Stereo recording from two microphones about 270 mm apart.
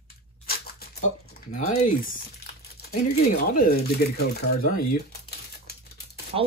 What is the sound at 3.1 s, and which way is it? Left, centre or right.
Speech, left.